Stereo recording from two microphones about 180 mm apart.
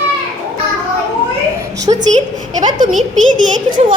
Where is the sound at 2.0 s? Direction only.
45° right (ahead or behind).